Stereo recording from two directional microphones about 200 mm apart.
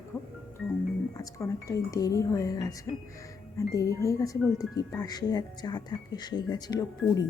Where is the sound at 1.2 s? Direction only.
15° left (ahead or behind).